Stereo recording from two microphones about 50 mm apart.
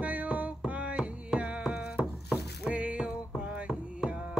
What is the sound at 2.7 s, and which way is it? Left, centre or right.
Music, right.